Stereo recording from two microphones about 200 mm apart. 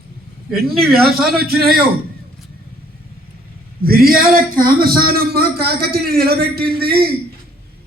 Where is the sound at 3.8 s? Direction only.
50° right (ahead or behind).